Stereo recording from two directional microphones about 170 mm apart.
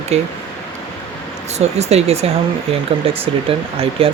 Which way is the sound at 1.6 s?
40° right (ahead or behind).